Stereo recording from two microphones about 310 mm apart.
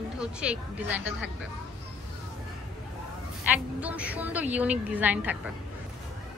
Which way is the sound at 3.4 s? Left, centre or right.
Centre.